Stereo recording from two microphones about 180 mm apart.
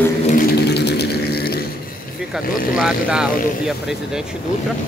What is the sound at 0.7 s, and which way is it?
Didgeridoo, 70° left (ahead or behind).